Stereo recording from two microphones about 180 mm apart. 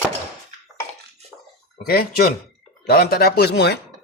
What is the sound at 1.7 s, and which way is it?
Speech, 60° left (ahead or behind).